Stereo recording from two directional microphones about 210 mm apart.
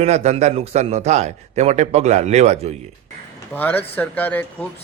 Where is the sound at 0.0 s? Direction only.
30° right (ahead or behind).